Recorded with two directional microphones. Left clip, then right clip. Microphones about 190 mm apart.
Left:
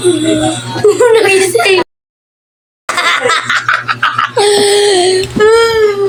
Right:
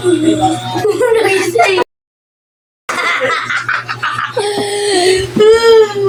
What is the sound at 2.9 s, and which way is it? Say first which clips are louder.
Laughter: left 3 dB; 55° left (ahead or behind).